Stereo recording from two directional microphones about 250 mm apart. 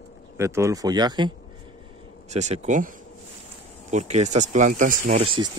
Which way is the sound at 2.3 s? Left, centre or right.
Right.